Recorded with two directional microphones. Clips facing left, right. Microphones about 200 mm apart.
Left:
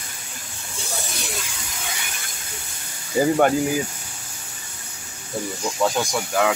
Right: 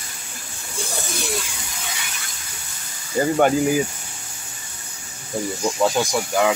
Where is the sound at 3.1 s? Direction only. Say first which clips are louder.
Even; centre (ahead or behind).